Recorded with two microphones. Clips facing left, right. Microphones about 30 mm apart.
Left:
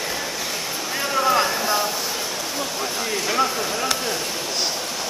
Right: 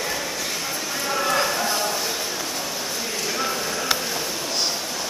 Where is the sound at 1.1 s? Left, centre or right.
Centre.